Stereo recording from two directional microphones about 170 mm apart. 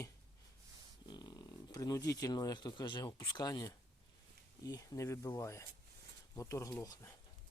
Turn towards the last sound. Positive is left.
turn(degrees=20)  # may be behind; listen again after turning